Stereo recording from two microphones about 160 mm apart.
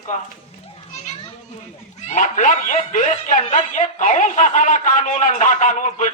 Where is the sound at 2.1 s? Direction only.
50° left (ahead or behind).